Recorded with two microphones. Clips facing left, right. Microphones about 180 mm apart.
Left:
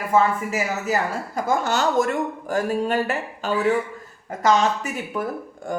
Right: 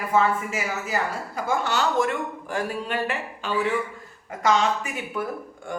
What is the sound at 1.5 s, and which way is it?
Speech, 45° left (ahead or behind).